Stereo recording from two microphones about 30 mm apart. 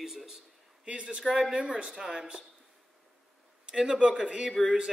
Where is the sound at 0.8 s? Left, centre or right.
Right.